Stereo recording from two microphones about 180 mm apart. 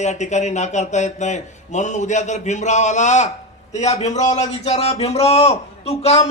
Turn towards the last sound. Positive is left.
turn(degrees=35)  # may be behind; listen again after turning